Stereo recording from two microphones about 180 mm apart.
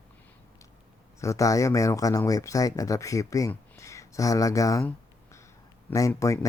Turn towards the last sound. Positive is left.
turn(degrees=15)  # may be behind; listen again after turning